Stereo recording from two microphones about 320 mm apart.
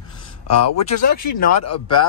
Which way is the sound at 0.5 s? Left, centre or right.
Left.